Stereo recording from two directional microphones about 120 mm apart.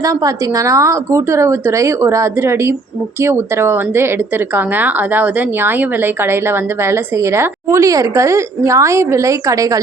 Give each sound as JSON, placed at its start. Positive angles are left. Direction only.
{"t": 0.0, "sound": "a woman's voice", "side_deg": -30}